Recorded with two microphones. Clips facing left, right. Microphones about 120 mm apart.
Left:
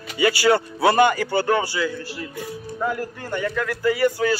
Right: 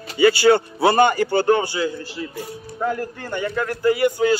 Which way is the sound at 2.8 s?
55° right (ahead or behind).